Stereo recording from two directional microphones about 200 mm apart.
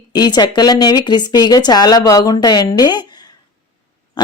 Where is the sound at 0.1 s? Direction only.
20° left (ahead or behind).